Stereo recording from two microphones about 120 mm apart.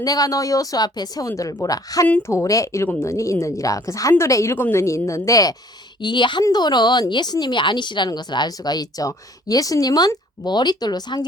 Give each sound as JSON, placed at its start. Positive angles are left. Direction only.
{"t": 0.0, "sound": "a woman's voice", "side_deg": 30}
{"t": 2.0, "sound": "speech", "side_deg": 10}
{"t": 2.3, "sound": "a woman's voice", "side_deg": 25}